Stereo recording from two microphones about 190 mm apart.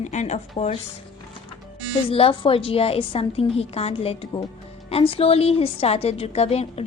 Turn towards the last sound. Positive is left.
turn(degrees=35)  # may be behind; listen again after turning